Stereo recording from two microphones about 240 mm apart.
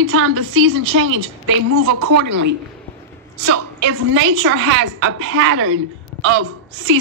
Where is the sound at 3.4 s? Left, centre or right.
Right.